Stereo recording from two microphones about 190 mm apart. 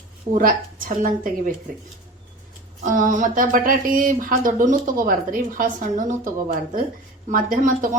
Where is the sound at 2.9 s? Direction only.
40° right (ahead or behind).